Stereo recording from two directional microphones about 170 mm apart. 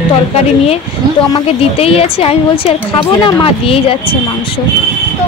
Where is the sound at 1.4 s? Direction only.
35° left (ahead or behind).